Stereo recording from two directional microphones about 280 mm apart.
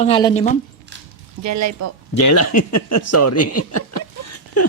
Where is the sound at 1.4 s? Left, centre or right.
Right.